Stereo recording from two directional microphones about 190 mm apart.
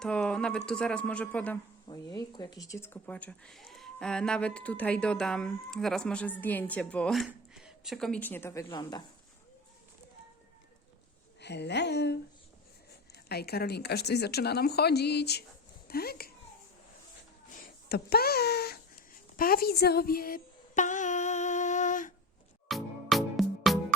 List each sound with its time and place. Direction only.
0.0 s speech: 5° left (ahead or behind)
1.9 s speech: 20° left (ahead or behind)
11.3 s a woman's voice: 65° left (ahead or behind)
13.2 s a woman's voice: 55° left (ahead or behind)
17.5 s speech: 55° left (ahead or behind)
19.4 s humming: 50° left (ahead or behind)
22.7 s music: centre (ahead or behind)